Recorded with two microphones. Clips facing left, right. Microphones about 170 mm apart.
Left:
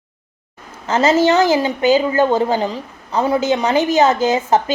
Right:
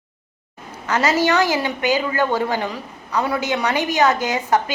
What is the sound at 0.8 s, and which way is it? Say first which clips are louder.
A woman's voice: left 5 dB; 25° left (ahead or behind).